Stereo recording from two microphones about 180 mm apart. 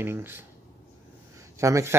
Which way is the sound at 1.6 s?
15° right (ahead or behind).